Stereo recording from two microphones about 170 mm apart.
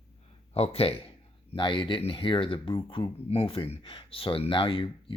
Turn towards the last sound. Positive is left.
turn(degrees=30)  # may be behind; listen again after turning